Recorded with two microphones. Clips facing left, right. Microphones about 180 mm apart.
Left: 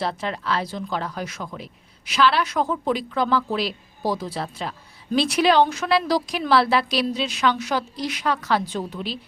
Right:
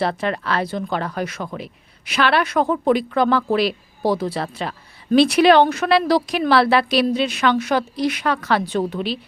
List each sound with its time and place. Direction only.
0.0 s speech: 60° right (ahead or behind)